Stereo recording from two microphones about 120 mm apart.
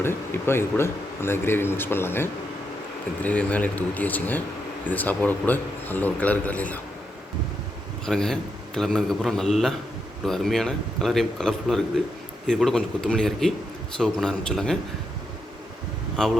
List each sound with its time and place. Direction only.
0.0 s a man's voice: 20° left (ahead or behind)
8.0 s a man's voice: 5° left (ahead or behind)
16.1 s a man's voice: centre (ahead or behind)